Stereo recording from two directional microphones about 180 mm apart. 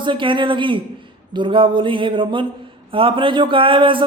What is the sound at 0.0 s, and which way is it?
Speech, 25° right (ahead or behind).